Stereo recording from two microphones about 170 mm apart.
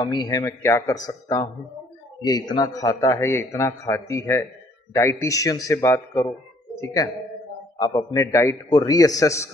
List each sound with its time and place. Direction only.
0.0 s a man's voice: 25° left (ahead or behind)